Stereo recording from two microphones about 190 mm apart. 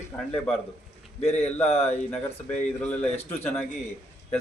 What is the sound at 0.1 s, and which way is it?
Speech, 10° left (ahead or behind).